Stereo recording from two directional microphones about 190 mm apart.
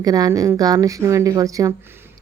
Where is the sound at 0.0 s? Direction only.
20° right (ahead or behind).